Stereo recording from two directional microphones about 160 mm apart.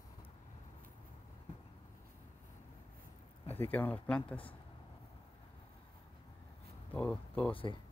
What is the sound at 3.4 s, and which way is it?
Speech, 10° left (ahead or behind).